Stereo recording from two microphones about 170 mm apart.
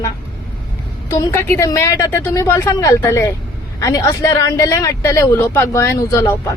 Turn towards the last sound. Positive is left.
turn(degrees=15)  # may be behind; listen again after turning